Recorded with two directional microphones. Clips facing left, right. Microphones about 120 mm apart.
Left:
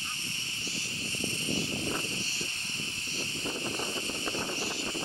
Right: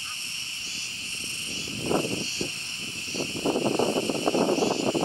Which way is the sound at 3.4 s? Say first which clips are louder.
Right 13 dB; 60° right (ahead or behind).